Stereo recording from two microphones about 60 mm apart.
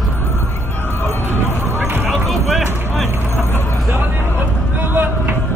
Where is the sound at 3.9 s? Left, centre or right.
Right.